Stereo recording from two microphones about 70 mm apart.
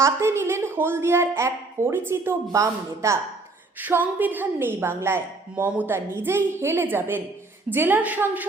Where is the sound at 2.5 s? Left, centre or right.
Right.